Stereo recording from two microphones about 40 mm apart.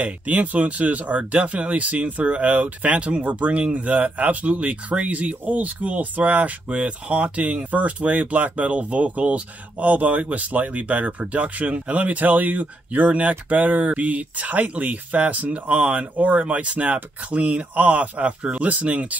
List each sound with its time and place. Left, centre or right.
0.0 s speech: right
15.7 s speech: right